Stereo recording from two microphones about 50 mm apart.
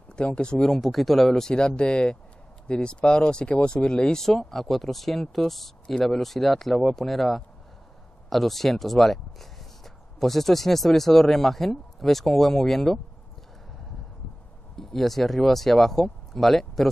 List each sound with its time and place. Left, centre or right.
0.1 s speech: centre
1.4 s speech: centre
4.3 s speech: centre
14.8 s speech: centre